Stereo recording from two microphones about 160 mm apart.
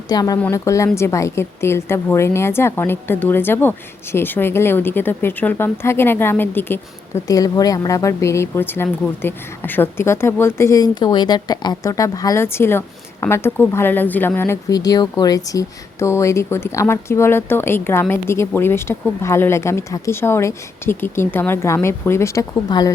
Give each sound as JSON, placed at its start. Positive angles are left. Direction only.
{"t": 0.1, "sound": "a woman's voice", "side_deg": 25}